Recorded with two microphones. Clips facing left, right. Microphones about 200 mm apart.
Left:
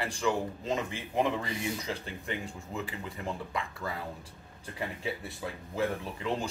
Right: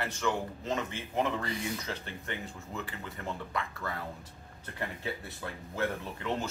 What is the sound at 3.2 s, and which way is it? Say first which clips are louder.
Speech: even; 10° left (ahead or behind).